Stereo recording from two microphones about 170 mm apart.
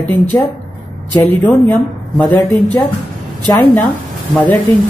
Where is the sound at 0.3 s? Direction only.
15° left (ahead or behind).